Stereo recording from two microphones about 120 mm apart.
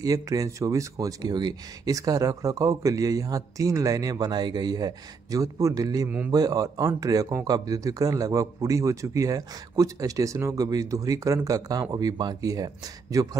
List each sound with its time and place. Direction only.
0.0 s speech: 30° right (ahead or behind)
6.0 s a man's voice: 15° right (ahead or behind)
6.3 s speech: 30° right (ahead or behind)